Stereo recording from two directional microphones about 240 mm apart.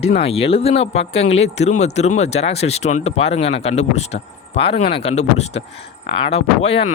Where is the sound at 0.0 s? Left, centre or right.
Left.